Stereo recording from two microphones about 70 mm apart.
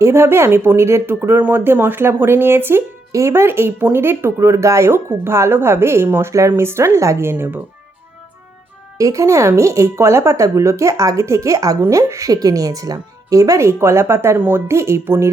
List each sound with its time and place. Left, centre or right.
0.0 s speech: right
3.1 s speech: right
9.0 s speech: right
14.3 s a woman's voice: right
14.7 s speech: right